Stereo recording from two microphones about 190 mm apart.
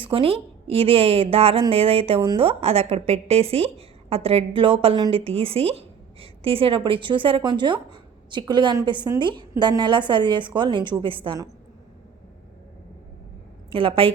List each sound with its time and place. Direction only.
0.0 s speech: 30° right (ahead or behind)
13.7 s speech: 30° right (ahead or behind)